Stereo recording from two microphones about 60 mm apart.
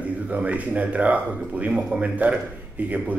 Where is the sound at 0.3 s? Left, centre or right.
Right.